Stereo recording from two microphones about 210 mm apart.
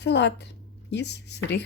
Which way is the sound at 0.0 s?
55° left (ahead or behind).